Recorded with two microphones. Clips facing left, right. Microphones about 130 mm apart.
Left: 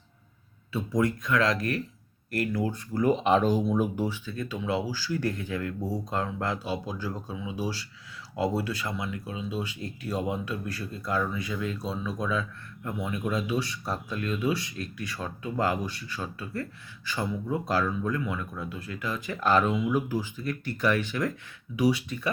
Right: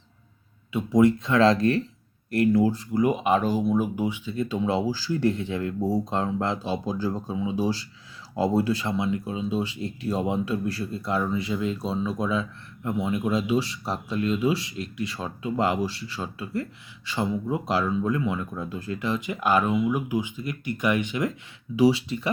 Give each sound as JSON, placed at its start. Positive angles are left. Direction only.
{"t": 0.7, "sound": "speech", "side_deg": -20}
{"t": 3.0, "sound": "speech", "side_deg": -10}